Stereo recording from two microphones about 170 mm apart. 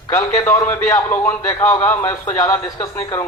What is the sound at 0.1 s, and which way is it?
A man's voice, 20° left (ahead or behind).